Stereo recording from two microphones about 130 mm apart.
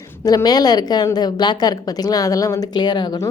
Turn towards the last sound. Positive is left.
turn(degrees=35)  # may be behind; listen again after turning